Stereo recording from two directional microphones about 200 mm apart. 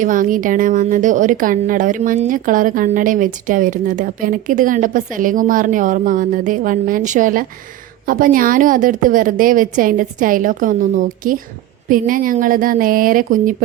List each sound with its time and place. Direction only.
0.0 s a woman's voice: 40° right (ahead or behind)